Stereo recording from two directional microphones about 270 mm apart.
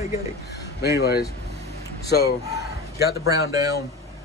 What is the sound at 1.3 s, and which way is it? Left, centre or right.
Vehicle, right.